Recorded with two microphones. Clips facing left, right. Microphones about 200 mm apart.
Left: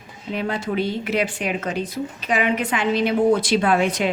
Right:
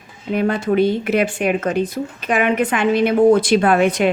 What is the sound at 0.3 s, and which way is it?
Speech, 50° right (ahead or behind).